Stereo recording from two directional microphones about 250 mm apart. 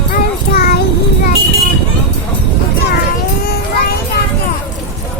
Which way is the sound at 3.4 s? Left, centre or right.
Left.